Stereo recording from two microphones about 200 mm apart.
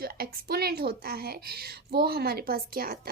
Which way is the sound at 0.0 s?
50° right (ahead or behind).